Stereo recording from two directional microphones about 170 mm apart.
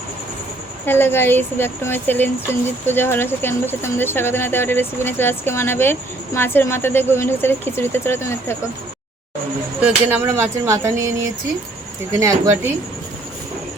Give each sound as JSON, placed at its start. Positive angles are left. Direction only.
{"t": 0.9, "sound": "speech", "side_deg": 10}
{"t": 9.8, "sound": "speech", "side_deg": -10}
{"t": 12.1, "sound": "speech", "side_deg": -20}